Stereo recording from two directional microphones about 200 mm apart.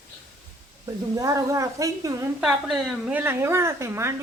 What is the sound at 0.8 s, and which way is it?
A woman's voice, 15° right (ahead or behind).